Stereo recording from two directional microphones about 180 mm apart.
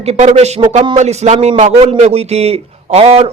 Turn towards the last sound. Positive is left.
turn(degrees=-35)  # may be behind; listen again after turning